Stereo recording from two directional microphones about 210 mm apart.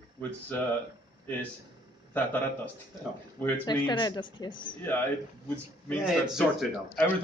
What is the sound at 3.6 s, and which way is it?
A woman's voice, 20° left (ahead or behind).